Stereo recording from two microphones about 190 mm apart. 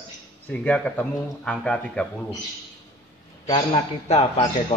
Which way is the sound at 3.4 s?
25° left (ahead or behind).